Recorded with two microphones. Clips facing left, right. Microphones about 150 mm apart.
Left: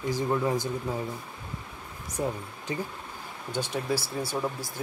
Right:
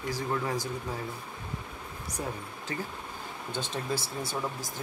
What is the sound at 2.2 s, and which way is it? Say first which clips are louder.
Speech: left 6 dB; 20° left (ahead or behind).